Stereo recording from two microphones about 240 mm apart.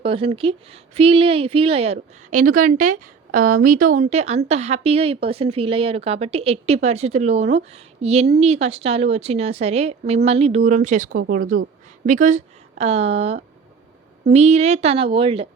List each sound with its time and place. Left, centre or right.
0.0 s speech: right